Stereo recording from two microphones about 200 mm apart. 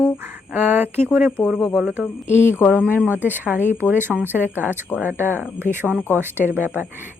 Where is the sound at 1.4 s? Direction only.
5° left (ahead or behind).